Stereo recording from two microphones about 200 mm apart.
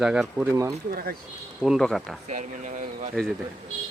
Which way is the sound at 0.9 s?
50° right (ahead or behind).